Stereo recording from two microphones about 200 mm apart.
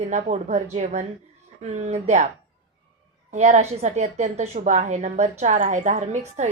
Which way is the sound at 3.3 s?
35° right (ahead or behind).